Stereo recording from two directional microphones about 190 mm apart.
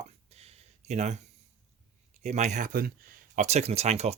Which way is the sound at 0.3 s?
35° right (ahead or behind).